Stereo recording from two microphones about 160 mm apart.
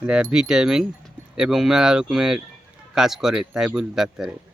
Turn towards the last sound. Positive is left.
turn(degrees=-5)  # may be behind; listen again after turning